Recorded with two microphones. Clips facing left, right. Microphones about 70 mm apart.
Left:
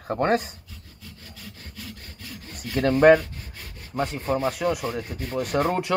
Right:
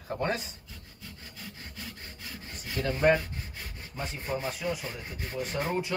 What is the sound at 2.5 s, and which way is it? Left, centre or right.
Speech, left.